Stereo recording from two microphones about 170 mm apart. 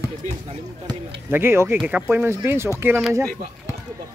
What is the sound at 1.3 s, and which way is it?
Speech, 15° right (ahead or behind).